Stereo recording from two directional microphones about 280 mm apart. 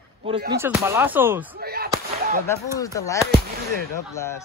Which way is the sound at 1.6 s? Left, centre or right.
Right.